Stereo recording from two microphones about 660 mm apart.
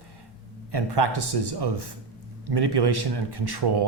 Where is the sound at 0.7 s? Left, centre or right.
Right.